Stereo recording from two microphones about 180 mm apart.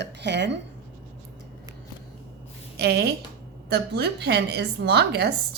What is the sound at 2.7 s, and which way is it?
A woman's voice, 65° right (ahead or behind).